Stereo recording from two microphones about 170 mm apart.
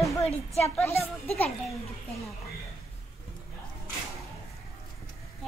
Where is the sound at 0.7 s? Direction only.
15° left (ahead or behind).